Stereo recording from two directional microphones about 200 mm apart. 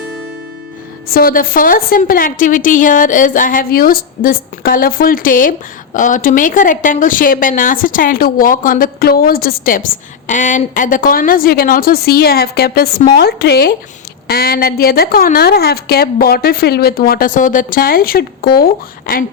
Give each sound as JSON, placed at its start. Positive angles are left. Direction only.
{"t": 1.0, "sound": "a woman's voice", "side_deg": 45}